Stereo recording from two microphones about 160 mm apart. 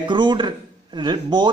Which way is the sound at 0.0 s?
30° right (ahead or behind).